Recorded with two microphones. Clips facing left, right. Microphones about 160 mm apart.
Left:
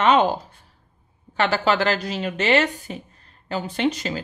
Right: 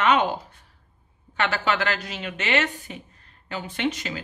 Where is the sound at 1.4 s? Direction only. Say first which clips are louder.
Left 4 dB; 35° left (ahead or behind).